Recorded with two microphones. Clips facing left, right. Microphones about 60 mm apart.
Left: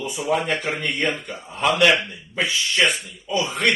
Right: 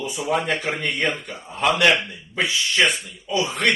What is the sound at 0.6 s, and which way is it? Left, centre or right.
Speech, left.